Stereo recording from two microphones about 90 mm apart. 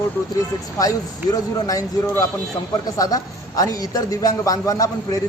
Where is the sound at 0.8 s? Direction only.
40° left (ahead or behind).